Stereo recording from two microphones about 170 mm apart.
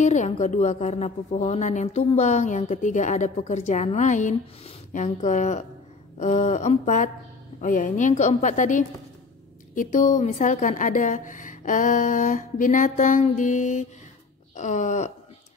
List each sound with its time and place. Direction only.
0.0 s a woman's voice: 45° left (ahead or behind)